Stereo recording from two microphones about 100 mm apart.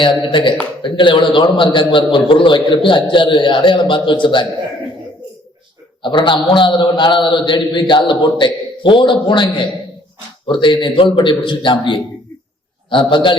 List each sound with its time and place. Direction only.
0.0 s a man's voice: 55° left (ahead or behind)
6.0 s a man's voice: 55° left (ahead or behind)